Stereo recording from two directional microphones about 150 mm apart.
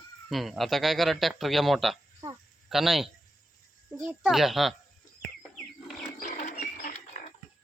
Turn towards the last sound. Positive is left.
turn(degrees=50)  # may be behind; listen again after turning